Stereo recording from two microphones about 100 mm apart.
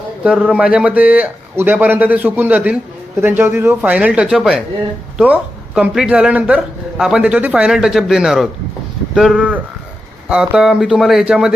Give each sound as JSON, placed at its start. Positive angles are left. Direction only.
{"t": 0.3, "sound": "a man's voice", "side_deg": -10}
{"t": 3.8, "sound": "a man's voice", "side_deg": -15}